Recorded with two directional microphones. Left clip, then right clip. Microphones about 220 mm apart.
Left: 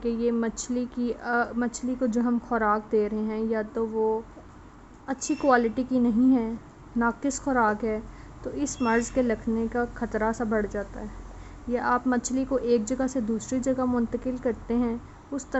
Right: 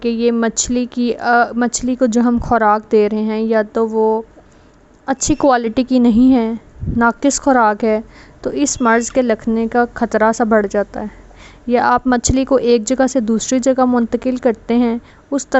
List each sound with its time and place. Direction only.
0.0 s speech: 40° right (ahead or behind)